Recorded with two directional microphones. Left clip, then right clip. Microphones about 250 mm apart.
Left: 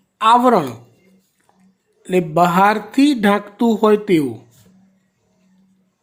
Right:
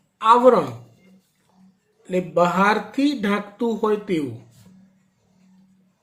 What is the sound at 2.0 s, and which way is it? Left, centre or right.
Speech, left.